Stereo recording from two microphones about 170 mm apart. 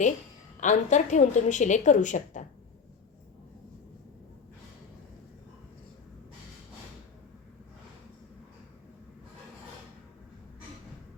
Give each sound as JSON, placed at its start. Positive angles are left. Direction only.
{"t": 0.6, "sound": "a woman's voice", "side_deg": 45}